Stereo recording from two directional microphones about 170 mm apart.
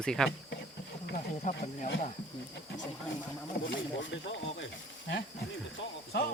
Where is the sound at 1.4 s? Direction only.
45° left (ahead or behind).